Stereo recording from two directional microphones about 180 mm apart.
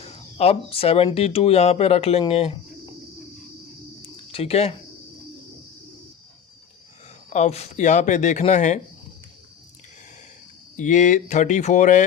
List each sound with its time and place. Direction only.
0.0 s speech: 35° left (ahead or behind)
4.3 s speech: 30° left (ahead or behind)
7.3 s speech: 35° left (ahead or behind)
10.8 s speech: 45° left (ahead or behind)